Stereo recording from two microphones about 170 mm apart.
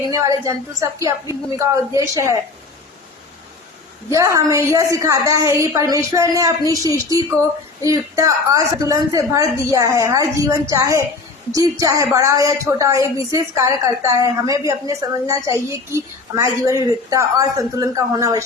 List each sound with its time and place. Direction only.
0.1 s a woman's voice: 20° right (ahead or behind)
4.1 s a woman's voice: 20° right (ahead or behind)